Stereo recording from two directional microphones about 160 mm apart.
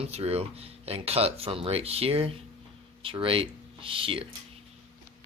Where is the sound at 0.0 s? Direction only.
40° right (ahead or behind).